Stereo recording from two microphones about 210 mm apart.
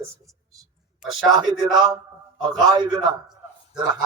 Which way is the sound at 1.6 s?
20° right (ahead or behind).